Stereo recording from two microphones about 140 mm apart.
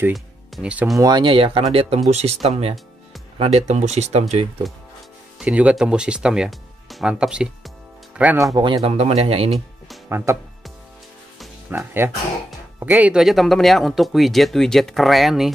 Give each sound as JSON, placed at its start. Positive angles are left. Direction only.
{"t": 0.1, "sound": "speech", "side_deg": -10}
{"t": 0.9, "sound": "speech", "side_deg": -30}
{"t": 5.4, "sound": "speech", "side_deg": -10}
{"t": 8.5, "sound": "speech", "side_deg": -35}
{"t": 8.9, "sound": "speech", "side_deg": -50}
{"t": 10.0, "sound": "speech", "side_deg": -20}
{"t": 11.7, "sound": "speech", "side_deg": -15}